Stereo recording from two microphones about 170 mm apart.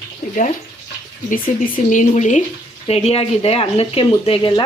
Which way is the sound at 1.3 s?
50° left (ahead or behind).